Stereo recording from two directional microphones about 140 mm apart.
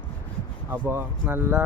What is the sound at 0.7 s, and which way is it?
Speech, 15° right (ahead or behind).